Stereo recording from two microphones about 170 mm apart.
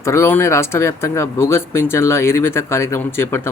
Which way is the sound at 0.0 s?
15° left (ahead or behind).